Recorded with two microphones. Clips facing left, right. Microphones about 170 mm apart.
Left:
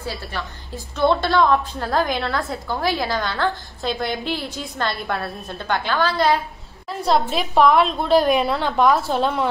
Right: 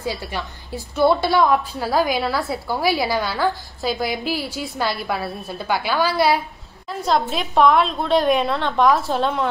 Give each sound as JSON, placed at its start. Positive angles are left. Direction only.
{"t": 0.0, "sound": "a woman's voice", "side_deg": -15}